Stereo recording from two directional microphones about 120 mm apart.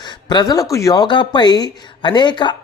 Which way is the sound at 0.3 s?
35° left (ahead or behind).